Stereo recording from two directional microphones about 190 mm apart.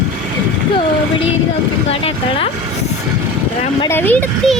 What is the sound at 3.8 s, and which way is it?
Speech, 10° left (ahead or behind).